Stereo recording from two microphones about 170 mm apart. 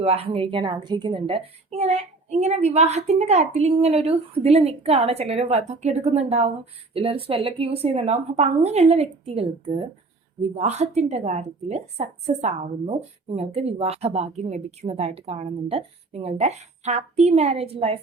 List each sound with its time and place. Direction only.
0.0 s a woman's voice: 35° right (ahead or behind)